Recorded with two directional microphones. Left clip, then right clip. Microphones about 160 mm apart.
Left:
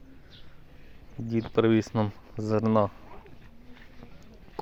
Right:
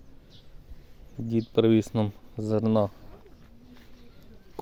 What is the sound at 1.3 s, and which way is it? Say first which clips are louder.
Speech: right 1 dB; 35° right (ahead or behind).